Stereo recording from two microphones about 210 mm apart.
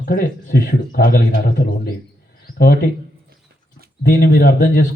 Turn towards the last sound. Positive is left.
turn(degrees=45)  # may be behind; listen again after turning